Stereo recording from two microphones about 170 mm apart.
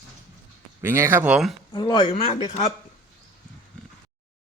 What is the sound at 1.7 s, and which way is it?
Speech, 25° left (ahead or behind).